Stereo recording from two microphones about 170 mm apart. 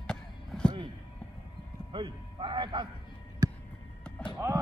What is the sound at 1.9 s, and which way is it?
A man's voice, 30° right (ahead or behind).